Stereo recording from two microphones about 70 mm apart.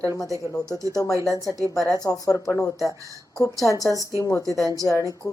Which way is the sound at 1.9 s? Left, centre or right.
Left.